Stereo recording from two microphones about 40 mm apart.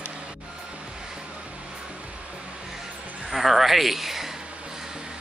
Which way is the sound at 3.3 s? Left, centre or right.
Centre.